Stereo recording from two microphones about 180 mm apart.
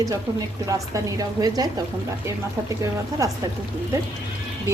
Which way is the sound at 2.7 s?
20° right (ahead or behind).